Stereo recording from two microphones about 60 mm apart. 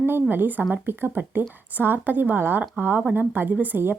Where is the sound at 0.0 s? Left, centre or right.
Right.